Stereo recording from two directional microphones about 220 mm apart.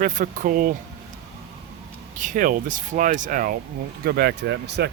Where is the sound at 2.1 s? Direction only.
35° right (ahead or behind).